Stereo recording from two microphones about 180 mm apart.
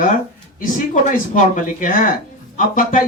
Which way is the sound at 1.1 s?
45° left (ahead or behind).